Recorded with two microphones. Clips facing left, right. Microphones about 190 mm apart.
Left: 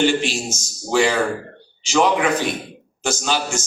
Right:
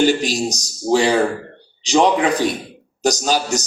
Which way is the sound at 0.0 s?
40° right (ahead or behind).